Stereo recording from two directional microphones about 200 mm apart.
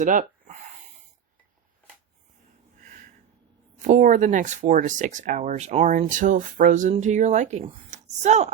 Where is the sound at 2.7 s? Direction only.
40° right (ahead or behind).